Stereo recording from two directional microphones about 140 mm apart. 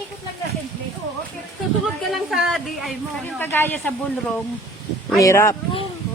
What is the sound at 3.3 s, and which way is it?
Speech, 15° left (ahead or behind).